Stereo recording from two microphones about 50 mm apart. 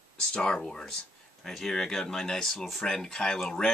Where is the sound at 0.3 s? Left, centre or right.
Centre.